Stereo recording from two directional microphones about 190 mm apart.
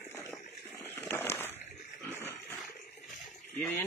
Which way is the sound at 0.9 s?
10° left (ahead or behind).